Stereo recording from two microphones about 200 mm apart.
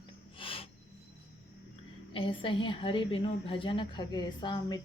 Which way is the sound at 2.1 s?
25° left (ahead or behind).